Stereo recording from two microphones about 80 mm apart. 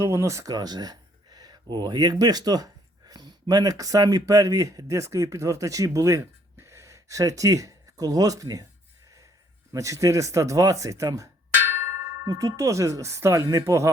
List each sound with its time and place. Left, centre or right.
0.0 s speech: right
0.5 s speech: right
9.7 s speech: right